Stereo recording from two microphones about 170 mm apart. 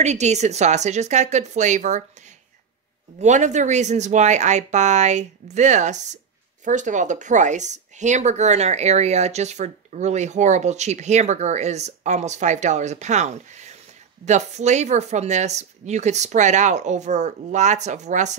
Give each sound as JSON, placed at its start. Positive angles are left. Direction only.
{"t": 0.0, "sound": "speech", "side_deg": -40}
{"t": 3.2, "sound": "speech", "side_deg": -45}